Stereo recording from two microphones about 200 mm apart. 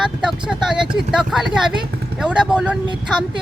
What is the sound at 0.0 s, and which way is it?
Vehicle, 5° right (ahead or behind).